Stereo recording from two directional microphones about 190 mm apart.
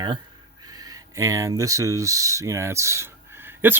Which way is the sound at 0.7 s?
20° right (ahead or behind).